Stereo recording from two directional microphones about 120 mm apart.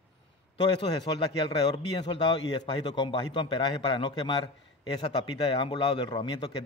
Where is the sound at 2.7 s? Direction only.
40° left (ahead or behind).